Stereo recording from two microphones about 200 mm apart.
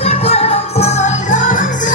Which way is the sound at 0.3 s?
30° left (ahead or behind).